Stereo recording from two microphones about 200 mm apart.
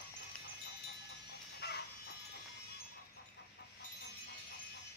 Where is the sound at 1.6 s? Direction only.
55° left (ahead or behind).